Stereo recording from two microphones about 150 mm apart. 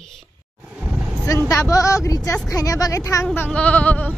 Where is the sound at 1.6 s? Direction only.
20° left (ahead or behind).